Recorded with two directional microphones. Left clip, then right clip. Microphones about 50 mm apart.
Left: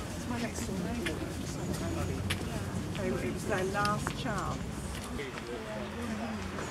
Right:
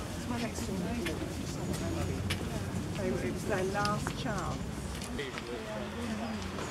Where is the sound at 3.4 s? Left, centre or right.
Left.